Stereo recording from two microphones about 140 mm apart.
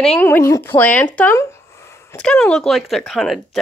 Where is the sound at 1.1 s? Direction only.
15° left (ahead or behind).